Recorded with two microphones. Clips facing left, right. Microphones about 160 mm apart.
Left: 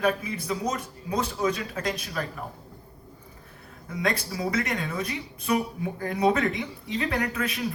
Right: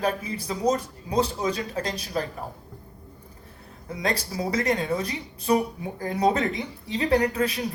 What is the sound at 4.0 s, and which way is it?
Speech, 35° right (ahead or behind).